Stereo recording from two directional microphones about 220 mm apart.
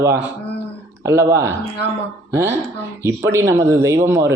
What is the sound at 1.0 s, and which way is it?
Speech, 15° right (ahead or behind).